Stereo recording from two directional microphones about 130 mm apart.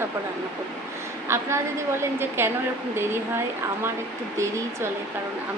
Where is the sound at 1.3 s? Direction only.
20° right (ahead or behind).